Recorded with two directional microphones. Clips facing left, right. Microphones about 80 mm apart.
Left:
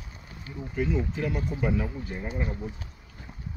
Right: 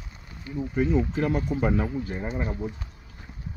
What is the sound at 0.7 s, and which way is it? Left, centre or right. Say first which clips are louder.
Speech: right 4 dB; right.